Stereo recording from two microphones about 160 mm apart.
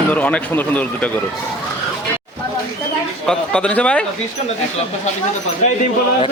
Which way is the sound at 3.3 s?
5° left (ahead or behind).